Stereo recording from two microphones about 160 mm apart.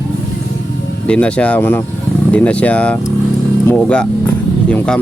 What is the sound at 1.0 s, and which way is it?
Speech, 5° left (ahead or behind).